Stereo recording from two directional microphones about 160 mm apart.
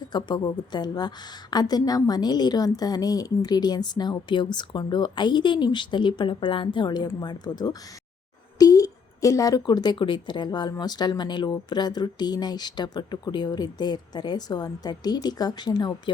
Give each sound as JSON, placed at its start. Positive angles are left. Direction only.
{"t": 0.1, "sound": "a woman's voice", "side_deg": 25}